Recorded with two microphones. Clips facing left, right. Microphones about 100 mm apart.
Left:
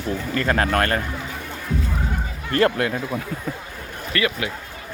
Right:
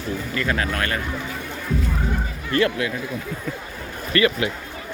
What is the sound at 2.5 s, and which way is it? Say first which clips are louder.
Speech: left 2 dB; 45° left (ahead or behind).